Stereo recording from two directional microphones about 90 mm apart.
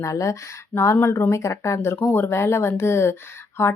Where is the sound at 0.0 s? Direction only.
35° left (ahead or behind).